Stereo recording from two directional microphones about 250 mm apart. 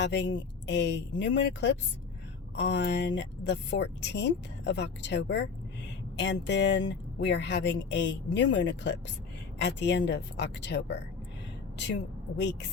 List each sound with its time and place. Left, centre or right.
0.0 s a woman's voice: left